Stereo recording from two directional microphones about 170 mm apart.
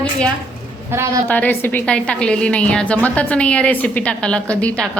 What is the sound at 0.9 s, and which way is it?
Speech, 15° right (ahead or behind).